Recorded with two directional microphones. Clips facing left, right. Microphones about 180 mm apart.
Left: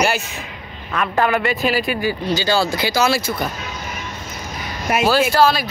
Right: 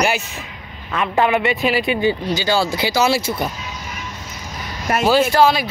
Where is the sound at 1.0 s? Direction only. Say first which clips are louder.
Right 1 dB; 15° right (ahead or behind).